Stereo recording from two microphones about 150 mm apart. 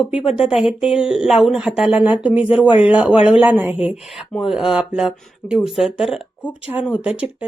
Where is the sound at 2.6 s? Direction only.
35° left (ahead or behind).